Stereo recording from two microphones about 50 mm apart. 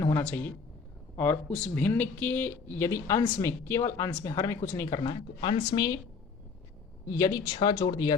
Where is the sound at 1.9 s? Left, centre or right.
Left.